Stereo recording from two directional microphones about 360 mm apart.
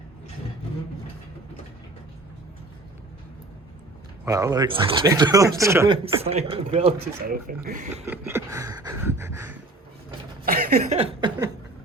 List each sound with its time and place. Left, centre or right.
4.3 s speech: centre
8.0 s speech: centre
10.4 s a sound: right